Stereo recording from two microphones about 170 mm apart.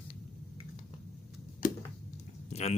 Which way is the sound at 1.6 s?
55° left (ahead or behind).